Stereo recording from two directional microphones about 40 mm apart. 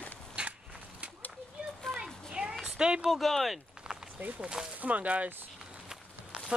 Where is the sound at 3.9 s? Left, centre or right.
Right.